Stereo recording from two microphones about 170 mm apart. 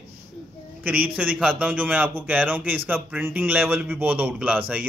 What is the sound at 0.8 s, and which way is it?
A man's voice, 10° right (ahead or behind).